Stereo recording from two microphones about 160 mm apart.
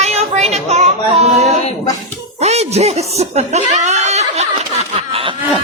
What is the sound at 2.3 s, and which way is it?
A woman's voice, 40° right (ahead or behind).